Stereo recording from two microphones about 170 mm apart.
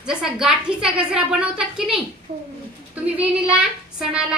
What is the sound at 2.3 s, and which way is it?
Speech, 35° right (ahead or behind).